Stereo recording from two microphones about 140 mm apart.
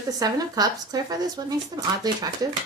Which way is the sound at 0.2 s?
25° right (ahead or behind).